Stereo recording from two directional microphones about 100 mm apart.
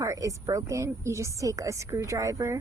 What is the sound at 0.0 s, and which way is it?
A woman's voice, 30° right (ahead or behind).